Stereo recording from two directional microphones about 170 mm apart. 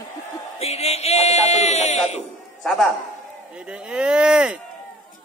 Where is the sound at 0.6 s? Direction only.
40° left (ahead or behind).